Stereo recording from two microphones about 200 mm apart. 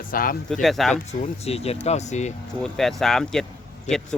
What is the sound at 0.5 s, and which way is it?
Speech, centre (ahead or behind).